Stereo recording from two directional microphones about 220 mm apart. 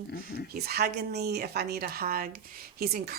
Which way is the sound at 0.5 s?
45° right (ahead or behind).